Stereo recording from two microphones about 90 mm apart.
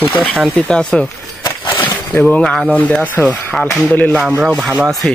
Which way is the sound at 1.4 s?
60° left (ahead or behind).